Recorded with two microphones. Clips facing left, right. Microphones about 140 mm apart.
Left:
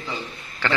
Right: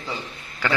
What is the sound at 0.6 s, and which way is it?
Speech, 10° right (ahead or behind).